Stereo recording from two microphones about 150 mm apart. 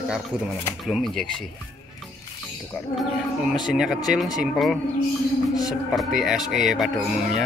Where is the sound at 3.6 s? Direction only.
5° right (ahead or behind).